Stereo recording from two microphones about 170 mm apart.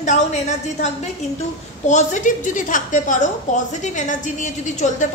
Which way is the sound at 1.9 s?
45° left (ahead or behind).